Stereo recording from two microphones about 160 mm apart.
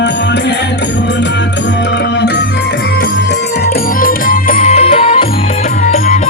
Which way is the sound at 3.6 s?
65° left (ahead or behind).